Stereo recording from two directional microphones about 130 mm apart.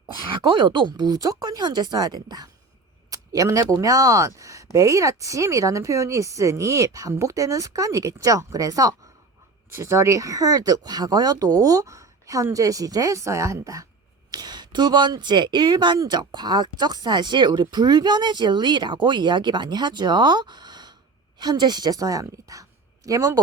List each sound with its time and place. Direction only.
0.3 s speech: 40° right (ahead or behind)